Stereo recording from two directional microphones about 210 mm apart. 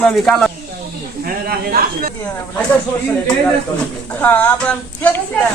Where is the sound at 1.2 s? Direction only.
45° right (ahead or behind).